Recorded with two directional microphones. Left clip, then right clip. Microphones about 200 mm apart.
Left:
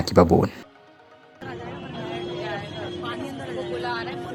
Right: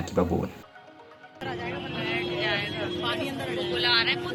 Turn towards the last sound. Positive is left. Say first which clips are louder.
# right 6 dB
turn(degrees=35)  # may be behind; listen again after turning